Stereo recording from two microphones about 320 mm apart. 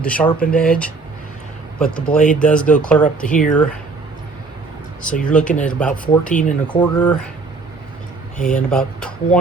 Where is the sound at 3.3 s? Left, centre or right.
Left.